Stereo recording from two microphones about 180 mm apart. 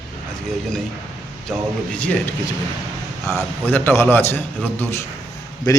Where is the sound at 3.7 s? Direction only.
10° left (ahead or behind).